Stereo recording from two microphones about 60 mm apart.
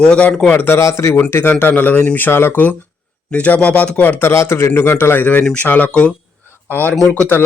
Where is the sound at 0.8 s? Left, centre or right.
Left.